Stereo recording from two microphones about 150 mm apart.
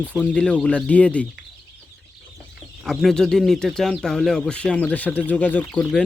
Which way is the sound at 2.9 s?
Centre (ahead or behind).